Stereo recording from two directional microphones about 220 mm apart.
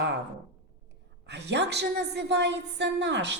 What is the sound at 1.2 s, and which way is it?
A woman's voice, 50° right (ahead or behind).